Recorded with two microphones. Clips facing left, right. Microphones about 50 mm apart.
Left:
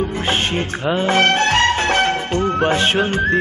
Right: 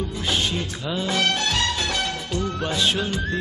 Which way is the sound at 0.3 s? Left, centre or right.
Left.